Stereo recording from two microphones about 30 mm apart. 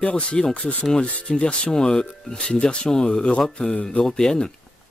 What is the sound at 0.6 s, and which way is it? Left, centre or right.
Speech, left.